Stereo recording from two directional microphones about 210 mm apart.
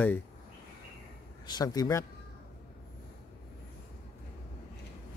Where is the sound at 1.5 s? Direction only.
20° left (ahead or behind).